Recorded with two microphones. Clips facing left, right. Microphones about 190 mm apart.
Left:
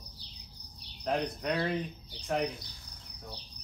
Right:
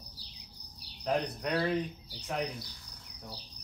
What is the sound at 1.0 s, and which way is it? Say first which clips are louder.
Speech: even; centre (ahead or behind).